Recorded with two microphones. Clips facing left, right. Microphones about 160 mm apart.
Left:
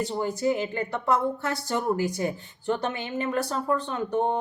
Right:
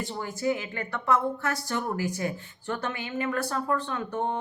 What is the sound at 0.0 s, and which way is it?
A woman's voice, 30° left (ahead or behind).